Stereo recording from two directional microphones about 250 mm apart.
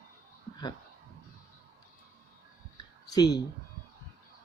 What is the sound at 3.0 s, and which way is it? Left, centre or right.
Speech, centre.